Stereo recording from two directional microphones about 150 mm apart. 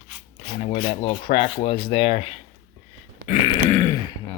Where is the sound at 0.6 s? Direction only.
45° left (ahead or behind).